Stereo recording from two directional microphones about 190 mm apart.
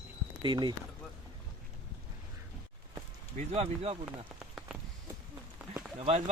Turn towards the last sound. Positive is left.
turn(degrees=-30)  # may be behind; listen again after turning